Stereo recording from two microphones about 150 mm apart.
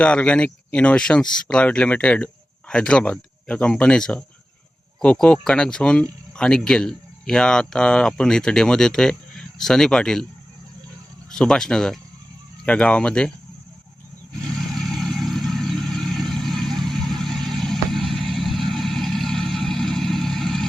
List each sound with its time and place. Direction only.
0.0 s speech: 5° left (ahead or behind)
11.3 s speech: 5° left (ahead or behind)
14.8 s vehicle: centre (ahead or behind)